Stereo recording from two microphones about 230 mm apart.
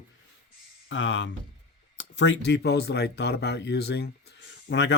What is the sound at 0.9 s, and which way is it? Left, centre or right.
Speech, left.